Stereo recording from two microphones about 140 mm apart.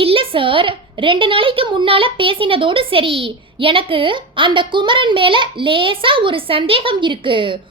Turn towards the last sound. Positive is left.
turn(degrees=-35)  # may be behind; listen again after turning